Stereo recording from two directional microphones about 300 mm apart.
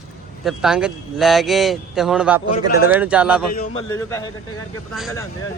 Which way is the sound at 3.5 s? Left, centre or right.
Left.